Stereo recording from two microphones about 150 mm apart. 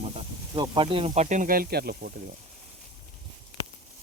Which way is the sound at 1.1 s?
55° right (ahead or behind).